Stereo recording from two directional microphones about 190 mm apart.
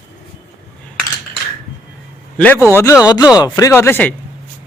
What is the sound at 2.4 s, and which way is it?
Speech, 10° left (ahead or behind).